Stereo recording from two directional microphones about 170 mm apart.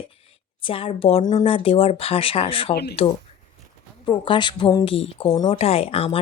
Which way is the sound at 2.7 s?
70° left (ahead or behind).